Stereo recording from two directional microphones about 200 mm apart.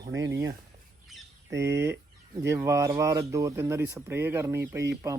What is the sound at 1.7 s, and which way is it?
Speech, 60° right (ahead or behind).